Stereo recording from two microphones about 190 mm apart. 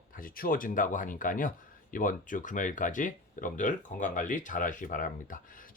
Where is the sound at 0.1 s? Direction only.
45° left (ahead or behind).